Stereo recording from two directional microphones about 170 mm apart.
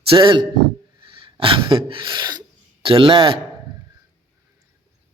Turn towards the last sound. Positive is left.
turn(degrees=-30)  # may be behind; listen again after turning